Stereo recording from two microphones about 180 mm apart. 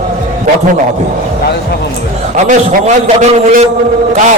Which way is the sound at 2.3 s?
45° right (ahead or behind).